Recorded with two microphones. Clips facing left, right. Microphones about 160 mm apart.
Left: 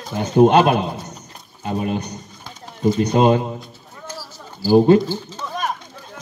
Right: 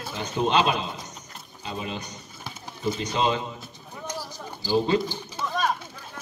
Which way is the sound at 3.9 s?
15° right (ahead or behind).